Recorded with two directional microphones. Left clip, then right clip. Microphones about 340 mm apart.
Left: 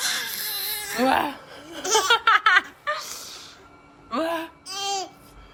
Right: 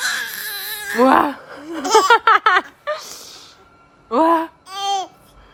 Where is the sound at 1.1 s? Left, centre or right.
Right.